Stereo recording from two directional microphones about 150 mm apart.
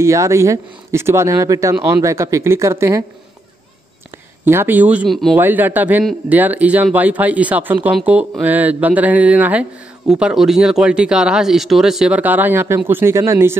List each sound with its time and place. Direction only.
0.0 s speech: 20° right (ahead or behind)
4.5 s speech: 15° right (ahead or behind)
5.4 s speech: 10° right (ahead or behind)